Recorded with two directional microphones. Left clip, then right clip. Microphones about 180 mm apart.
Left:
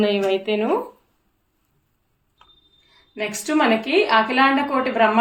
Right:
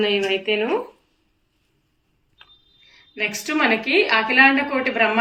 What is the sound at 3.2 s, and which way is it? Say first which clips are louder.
A woman's voice: even; 25° left (ahead or behind).